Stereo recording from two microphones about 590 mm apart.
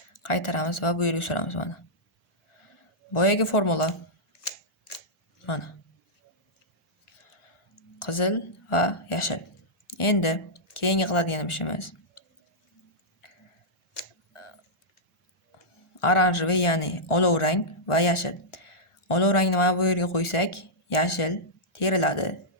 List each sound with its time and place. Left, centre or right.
0.2 s speech: left
3.1 s speech: left
5.5 s speech: left
8.0 s speech: left
13.9 s a sound: left
16.0 s speech: left